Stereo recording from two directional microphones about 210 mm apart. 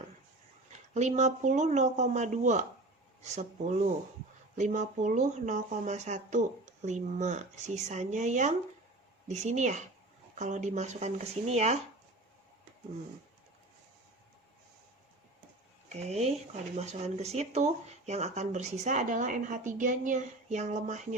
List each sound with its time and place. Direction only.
0.9 s speech: 35° right (ahead or behind)
15.9 s speech: 30° right (ahead or behind)